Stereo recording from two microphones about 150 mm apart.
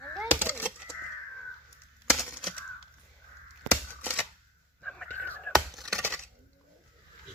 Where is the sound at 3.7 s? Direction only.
10° left (ahead or behind).